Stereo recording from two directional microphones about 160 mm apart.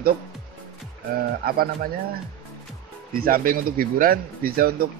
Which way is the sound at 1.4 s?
70° right (ahead or behind).